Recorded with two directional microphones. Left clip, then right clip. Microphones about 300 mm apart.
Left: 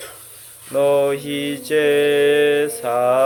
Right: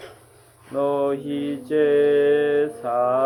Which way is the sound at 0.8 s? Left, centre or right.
Left.